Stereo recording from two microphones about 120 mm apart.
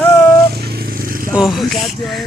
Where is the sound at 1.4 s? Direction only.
Centre (ahead or behind).